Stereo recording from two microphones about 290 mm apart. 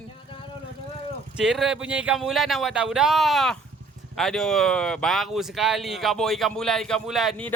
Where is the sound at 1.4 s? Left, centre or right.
Centre.